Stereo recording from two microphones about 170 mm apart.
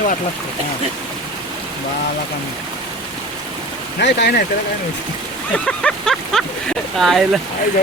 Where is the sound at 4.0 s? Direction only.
75° left (ahead or behind).